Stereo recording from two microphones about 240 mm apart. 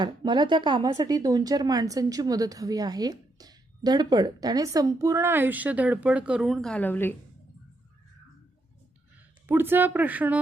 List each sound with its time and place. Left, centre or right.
0.0 s speech: centre
9.5 s speech: centre